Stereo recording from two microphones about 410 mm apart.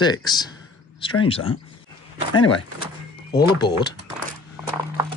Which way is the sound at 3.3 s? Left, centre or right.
Centre.